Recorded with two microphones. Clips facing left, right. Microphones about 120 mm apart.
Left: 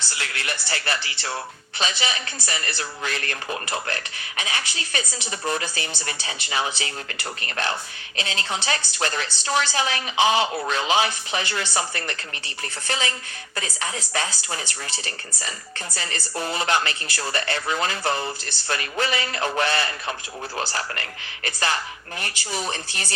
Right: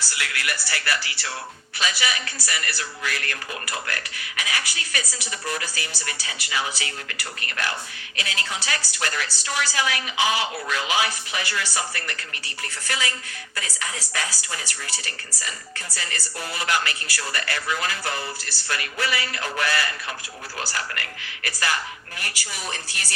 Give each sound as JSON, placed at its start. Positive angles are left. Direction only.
{"t": 0.1, "sound": "speech", "side_deg": 30}